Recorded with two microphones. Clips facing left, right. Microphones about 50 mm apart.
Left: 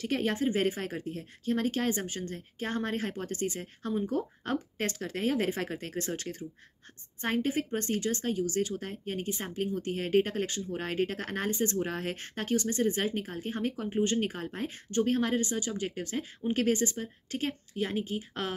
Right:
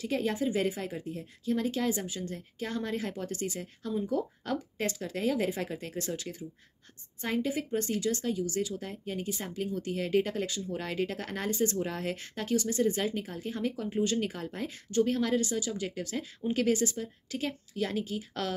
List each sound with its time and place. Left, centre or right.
0.0 s speech: left
17.7 s a woman's voice: left